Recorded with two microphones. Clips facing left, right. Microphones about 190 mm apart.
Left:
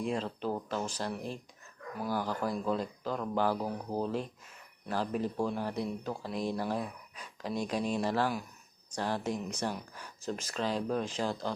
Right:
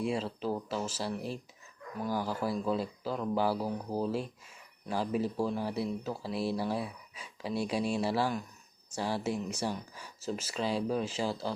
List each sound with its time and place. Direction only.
0.0 s speech: 5° right (ahead or behind)